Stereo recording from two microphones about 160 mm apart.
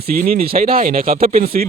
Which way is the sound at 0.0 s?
65° right (ahead or behind).